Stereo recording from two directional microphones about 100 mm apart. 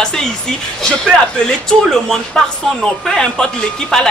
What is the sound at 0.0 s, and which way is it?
Speech, 5° left (ahead or behind).